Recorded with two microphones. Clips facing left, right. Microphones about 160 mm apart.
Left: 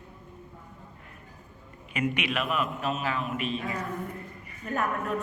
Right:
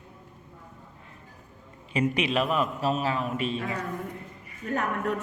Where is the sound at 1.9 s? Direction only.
30° right (ahead or behind).